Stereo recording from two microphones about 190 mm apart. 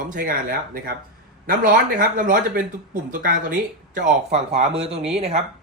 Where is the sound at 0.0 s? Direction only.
45° right (ahead or behind).